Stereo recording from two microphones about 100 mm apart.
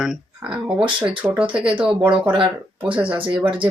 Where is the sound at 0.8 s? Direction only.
15° right (ahead or behind).